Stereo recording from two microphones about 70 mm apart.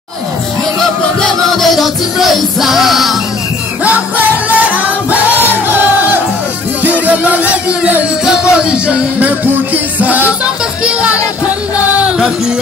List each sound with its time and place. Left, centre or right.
0.7 s music: centre
3.8 s music: right